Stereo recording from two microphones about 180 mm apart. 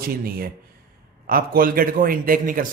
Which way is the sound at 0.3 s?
55° right (ahead or behind).